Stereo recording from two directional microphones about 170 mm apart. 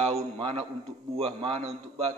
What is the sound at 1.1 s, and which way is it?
A man's voice, 35° right (ahead or behind).